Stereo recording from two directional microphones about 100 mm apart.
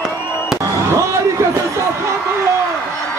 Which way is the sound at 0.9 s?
30° right (ahead or behind).